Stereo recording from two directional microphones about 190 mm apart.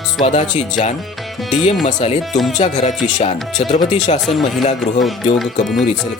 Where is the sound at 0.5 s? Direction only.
40° left (ahead or behind).